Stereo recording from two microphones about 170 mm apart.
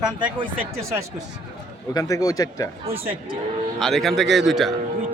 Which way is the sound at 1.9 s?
20° left (ahead or behind).